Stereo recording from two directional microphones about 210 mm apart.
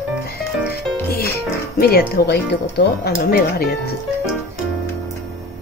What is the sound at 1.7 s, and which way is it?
Speech, 45° left (ahead or behind).